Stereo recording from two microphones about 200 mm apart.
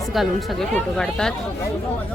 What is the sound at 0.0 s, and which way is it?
Speech, centre (ahead or behind).